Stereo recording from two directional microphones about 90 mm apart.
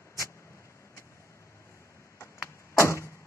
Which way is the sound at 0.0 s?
30° left (ahead or behind).